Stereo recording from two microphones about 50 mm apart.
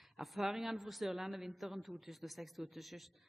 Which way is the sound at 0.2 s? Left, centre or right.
Centre.